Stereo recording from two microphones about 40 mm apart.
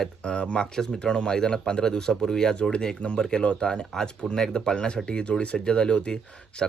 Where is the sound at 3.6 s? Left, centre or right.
Centre.